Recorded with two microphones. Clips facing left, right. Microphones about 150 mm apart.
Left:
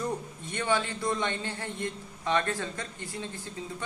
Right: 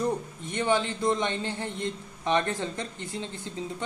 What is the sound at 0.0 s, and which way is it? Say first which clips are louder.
A man's voice: right 4 dB; 20° right (ahead or behind).